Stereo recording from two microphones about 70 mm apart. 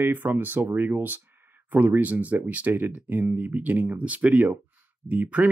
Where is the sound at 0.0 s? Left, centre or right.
Right.